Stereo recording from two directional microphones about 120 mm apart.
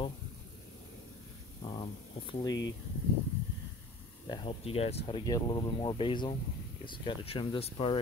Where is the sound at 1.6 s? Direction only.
40° left (ahead or behind).